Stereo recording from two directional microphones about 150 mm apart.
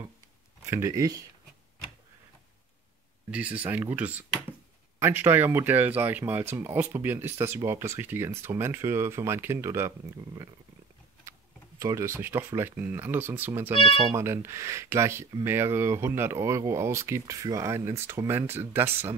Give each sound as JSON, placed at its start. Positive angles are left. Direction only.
{"t": 0.7, "sound": "speech", "side_deg": -20}
{"t": 3.3, "sound": "speech", "side_deg": -10}
{"t": 11.8, "sound": "speech", "side_deg": -20}